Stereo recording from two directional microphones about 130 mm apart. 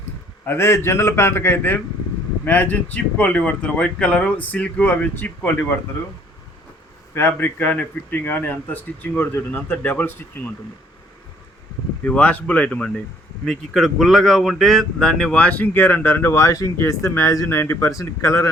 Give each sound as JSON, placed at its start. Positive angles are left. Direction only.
{"t": 0.4, "sound": "speech", "side_deg": 20}
{"t": 7.1, "sound": "speech", "side_deg": 15}
{"t": 12.0, "sound": "speech", "side_deg": 10}